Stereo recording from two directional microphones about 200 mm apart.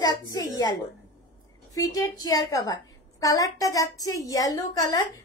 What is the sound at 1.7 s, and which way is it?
A woman's voice, 15° left (ahead or behind).